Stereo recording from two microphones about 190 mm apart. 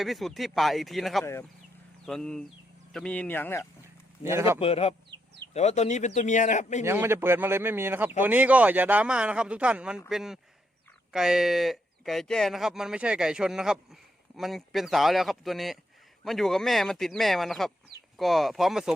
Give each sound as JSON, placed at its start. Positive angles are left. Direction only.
{"t": 0.0, "sound": "speech", "side_deg": 0}
{"t": 1.2, "sound": "speech", "side_deg": 15}
{"t": 2.0, "sound": "speech", "side_deg": 5}
{"t": 4.2, "sound": "speech", "side_deg": -15}
{"t": 4.6, "sound": "a man's voice", "side_deg": 30}
{"t": 6.8, "sound": "speech", "side_deg": -10}